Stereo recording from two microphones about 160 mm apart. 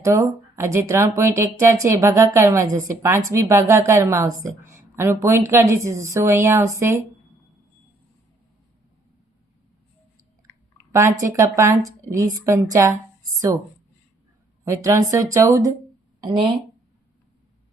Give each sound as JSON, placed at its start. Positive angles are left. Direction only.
{"t": 0.0, "sound": "speech", "side_deg": -15}
{"t": 10.9, "sound": "speech", "side_deg": -20}
{"t": 14.6, "sound": "speech", "side_deg": -20}